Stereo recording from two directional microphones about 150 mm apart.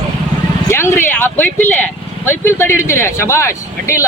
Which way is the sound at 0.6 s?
15° left (ahead or behind).